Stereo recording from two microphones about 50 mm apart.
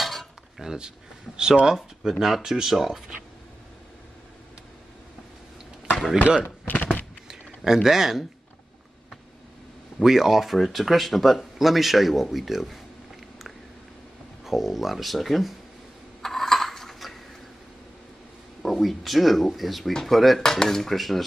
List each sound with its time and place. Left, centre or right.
0.0 s cutlery: centre
0.6 s speech: centre
6.7 s a sound: left
7.2 s speech: centre
10.0 s speech: centre
14.4 s speech: centre
16.2 s coin: centre
18.6 s speech: centre